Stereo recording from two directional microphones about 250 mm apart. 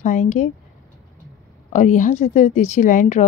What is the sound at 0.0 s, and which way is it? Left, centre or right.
Speech, left.